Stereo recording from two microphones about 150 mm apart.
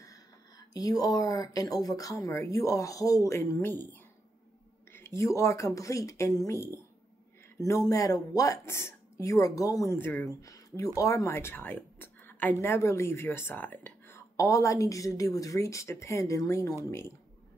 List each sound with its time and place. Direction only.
0.7 s speech: 25° left (ahead or behind)